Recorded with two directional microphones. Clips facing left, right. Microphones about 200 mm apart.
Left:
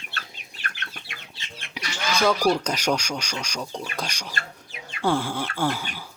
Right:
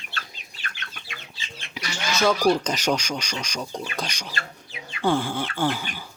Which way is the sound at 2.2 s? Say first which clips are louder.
Right 1 dB; 5° right (ahead or behind).